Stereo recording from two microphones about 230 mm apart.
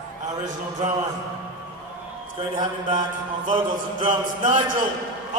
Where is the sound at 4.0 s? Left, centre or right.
Right.